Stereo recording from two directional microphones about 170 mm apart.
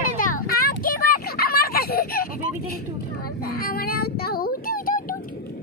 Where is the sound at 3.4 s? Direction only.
60° left (ahead or behind).